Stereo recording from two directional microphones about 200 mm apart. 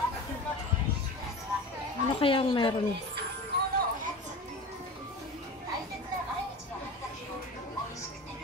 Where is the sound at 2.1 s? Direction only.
25° left (ahead or behind).